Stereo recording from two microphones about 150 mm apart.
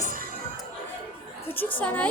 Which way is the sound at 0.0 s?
65° right (ahead or behind).